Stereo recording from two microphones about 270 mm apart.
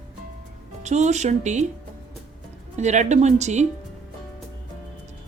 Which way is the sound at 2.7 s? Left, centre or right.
Right.